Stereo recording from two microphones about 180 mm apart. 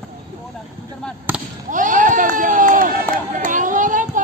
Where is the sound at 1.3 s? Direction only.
10° right (ahead or behind).